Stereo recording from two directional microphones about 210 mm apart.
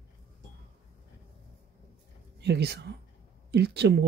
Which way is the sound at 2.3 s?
55° right (ahead or behind).